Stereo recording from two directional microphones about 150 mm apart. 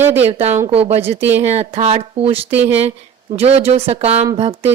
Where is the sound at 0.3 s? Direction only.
45° right (ahead or behind).